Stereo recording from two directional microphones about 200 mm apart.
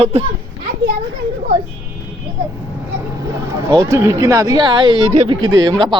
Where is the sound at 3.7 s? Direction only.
15° right (ahead or behind).